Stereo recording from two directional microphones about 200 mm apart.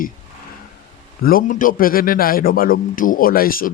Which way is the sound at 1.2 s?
45° left (ahead or behind).